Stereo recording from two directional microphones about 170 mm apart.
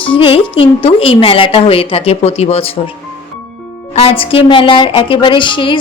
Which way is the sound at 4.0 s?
35° left (ahead or behind).